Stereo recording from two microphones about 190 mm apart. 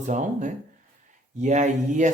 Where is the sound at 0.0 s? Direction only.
40° right (ahead or behind).